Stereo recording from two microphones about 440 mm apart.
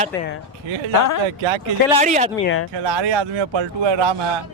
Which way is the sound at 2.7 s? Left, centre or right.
Right.